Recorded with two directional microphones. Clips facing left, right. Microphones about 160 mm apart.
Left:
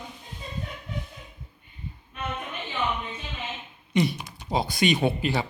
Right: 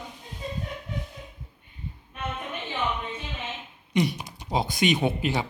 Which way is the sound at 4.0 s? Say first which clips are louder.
Left 1 dB; 15° right (ahead or behind).